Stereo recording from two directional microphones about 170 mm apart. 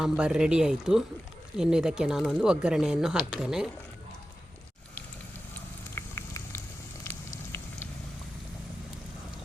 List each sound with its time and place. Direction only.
0.0 s speech: 5° right (ahead or behind)
5.9 s boiling: 15° left (ahead or behind)
7.0 s fire: 15° left (ahead or behind)